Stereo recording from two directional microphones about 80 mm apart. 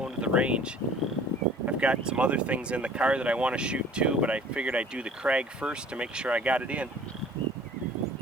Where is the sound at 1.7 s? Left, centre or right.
Centre.